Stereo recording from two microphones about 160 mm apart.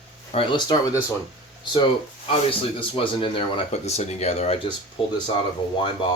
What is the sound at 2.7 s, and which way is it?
Speech, 35° left (ahead or behind).